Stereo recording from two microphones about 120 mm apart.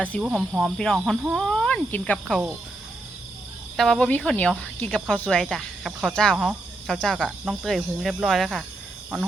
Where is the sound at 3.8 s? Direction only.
5° left (ahead or behind).